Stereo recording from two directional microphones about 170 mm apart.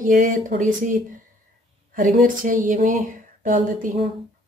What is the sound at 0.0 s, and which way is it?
Speech, 50° right (ahead or behind).